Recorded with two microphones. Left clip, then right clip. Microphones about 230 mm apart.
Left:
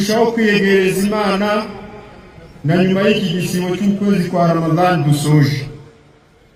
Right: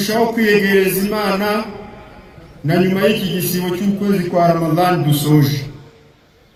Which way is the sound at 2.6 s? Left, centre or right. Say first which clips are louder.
Left 1 dB; right.